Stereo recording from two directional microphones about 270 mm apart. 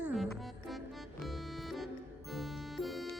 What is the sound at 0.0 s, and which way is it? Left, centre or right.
Music, centre.